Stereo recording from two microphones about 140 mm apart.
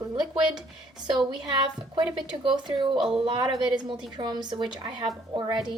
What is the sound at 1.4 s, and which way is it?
A woman's voice, 30° right (ahead or behind).